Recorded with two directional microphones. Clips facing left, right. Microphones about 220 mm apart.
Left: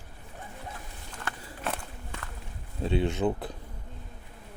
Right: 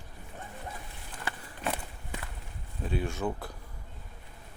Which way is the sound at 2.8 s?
25° left (ahead or behind).